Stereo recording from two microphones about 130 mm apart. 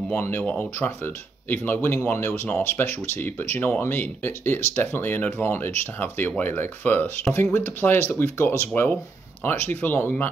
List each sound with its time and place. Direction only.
0.1 s speech: 20° left (ahead or behind)